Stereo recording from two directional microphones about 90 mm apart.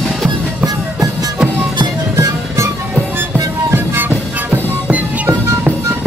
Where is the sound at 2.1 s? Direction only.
30° right (ahead or behind).